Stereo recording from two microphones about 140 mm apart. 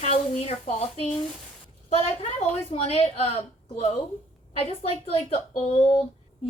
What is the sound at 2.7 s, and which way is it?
Speech, 50° left (ahead or behind).